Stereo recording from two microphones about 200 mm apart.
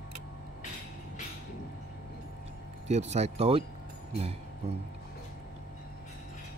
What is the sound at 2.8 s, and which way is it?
Speech, 35° right (ahead or behind).